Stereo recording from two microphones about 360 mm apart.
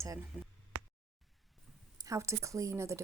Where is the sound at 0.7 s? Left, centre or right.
Right.